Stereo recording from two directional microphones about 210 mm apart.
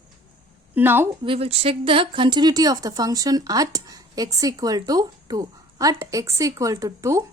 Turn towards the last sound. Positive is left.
turn(degrees=-15)  # may be behind; listen again after turning